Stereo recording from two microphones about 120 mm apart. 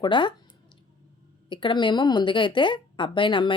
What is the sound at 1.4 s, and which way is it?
Speech, 40° left (ahead or behind).